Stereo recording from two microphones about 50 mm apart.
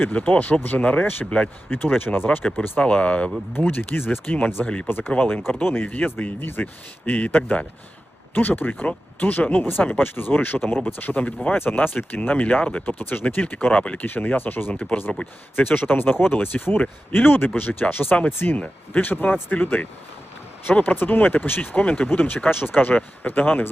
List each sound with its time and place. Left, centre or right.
0.0 s speech: left
1.7 s speech: left
2.7 s speech: left
3.6 s speech: left
4.6 s speech: left
4.9 s speech: left
7.0 s speech: left
13.0 s speech: left
14.1 s speech: left
14.7 s speech: left
15.5 s speech: left
18.5 s speech: left